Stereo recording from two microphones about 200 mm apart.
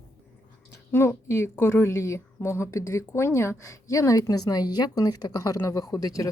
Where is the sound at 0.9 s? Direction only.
10° left (ahead or behind).